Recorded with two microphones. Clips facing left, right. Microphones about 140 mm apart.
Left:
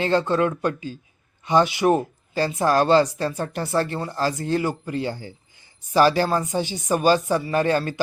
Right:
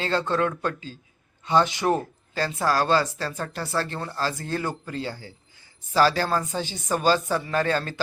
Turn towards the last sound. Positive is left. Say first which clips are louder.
# left 4 dB
turn(degrees=15)  # may be behind; listen again after turning